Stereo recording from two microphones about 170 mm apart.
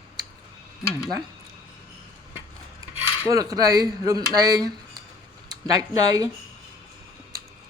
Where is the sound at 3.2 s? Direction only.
20° right (ahead or behind).